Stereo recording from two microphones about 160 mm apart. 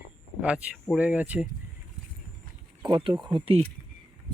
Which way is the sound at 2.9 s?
35° right (ahead or behind).